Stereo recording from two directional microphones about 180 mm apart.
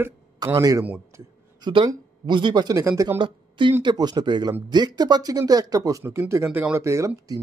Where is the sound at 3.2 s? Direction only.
25° right (ahead or behind).